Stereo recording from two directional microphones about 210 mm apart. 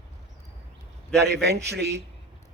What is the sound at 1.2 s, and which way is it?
Speech, 50° right (ahead or behind).